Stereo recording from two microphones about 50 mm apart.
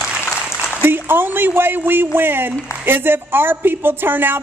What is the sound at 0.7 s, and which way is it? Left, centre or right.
A woman's voice, right.